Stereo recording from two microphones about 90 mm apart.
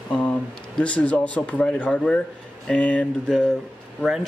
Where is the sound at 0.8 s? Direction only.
15° left (ahead or behind).